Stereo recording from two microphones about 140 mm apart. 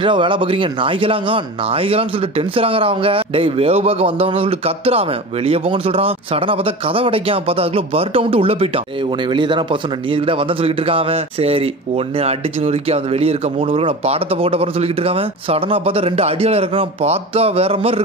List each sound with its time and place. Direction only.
0.0 s a man's voice: 35° right (ahead or behind)